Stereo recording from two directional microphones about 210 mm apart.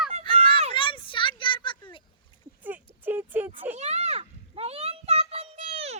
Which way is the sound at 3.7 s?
30° right (ahead or behind).